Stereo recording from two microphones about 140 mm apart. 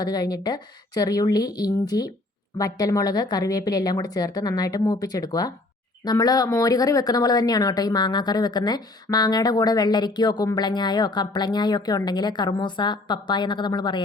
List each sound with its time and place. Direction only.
0.0 s speech: 30° left (ahead or behind)